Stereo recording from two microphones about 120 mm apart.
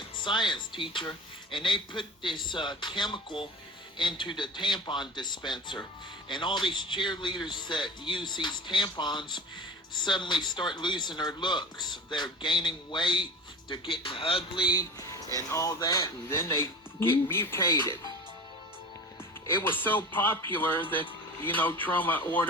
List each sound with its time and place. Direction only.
0.3 s a man's voice: 40° left (ahead or behind); by 18.1 s 25° left (ahead or behind)
19.7 s speech: 15° left (ahead or behind)